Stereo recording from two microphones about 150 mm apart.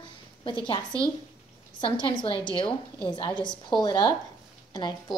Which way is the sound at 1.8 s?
35° left (ahead or behind).